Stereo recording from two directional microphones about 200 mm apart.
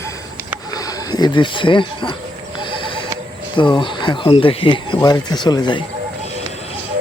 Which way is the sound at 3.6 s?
25° left (ahead or behind).